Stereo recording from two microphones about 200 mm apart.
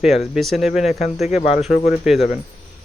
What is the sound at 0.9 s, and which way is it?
Speech, 35° left (ahead or behind).